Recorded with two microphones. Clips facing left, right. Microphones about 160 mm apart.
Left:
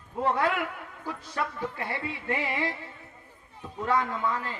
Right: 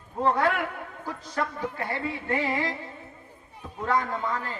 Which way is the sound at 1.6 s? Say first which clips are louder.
Right 2 dB; 15° right (ahead or behind).